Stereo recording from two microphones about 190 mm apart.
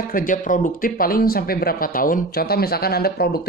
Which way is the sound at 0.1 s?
45° left (ahead or behind).